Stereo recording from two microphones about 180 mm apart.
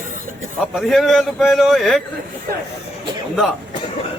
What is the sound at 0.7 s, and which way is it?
A man's voice, centre (ahead or behind).